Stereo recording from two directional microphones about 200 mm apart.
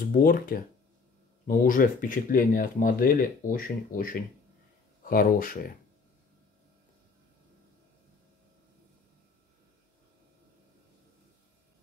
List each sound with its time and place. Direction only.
0.1 s speech: 45° left (ahead or behind)